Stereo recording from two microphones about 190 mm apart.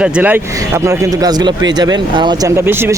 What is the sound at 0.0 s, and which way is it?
Speech, 5° right (ahead or behind).